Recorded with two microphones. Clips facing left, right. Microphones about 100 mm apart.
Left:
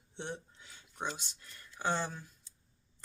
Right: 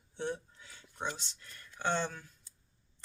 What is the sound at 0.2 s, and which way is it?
Speech, 20° left (ahead or behind).